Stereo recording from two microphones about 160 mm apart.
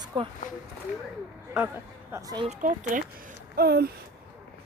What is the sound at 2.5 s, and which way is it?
Speech, 50° right (ahead or behind).